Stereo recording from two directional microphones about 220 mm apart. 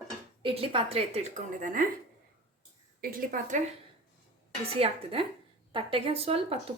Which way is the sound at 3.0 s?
40° right (ahead or behind).